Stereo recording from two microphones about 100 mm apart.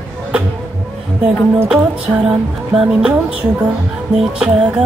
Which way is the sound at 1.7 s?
10° right (ahead or behind).